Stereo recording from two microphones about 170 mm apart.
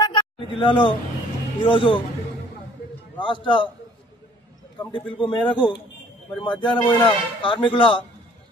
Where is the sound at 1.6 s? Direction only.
30° left (ahead or behind).